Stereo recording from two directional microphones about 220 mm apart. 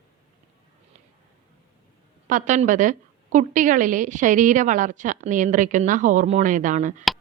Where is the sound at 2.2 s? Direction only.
35° right (ahead or behind).